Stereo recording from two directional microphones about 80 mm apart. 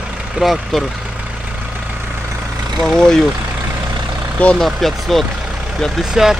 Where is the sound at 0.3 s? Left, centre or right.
Centre.